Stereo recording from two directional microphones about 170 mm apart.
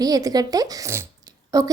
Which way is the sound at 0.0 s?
20° right (ahead or behind).